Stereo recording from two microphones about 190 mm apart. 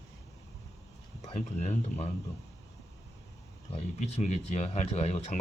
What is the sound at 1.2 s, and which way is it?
Speech, 35° left (ahead or behind).